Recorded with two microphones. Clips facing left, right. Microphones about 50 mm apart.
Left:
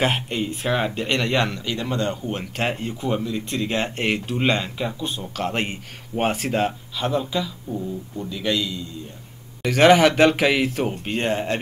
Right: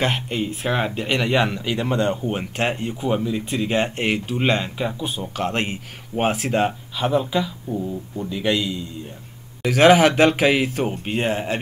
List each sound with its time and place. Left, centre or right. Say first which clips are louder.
0.0 s speech: even; centre
2.5 s speech: right 2 dB; centre
7.0 s speech: right 3 dB; centre
9.6 s speech: right 1 dB; centre